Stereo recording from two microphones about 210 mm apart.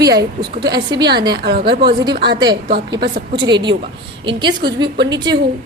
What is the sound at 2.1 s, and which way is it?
Speech, 45° right (ahead or behind).